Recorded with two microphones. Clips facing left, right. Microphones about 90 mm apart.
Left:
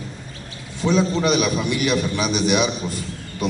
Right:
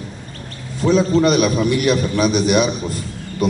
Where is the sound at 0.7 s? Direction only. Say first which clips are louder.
Right 5 dB; centre (ahead or behind).